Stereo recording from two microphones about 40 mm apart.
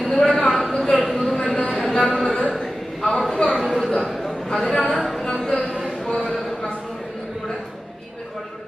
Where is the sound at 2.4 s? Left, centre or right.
Left.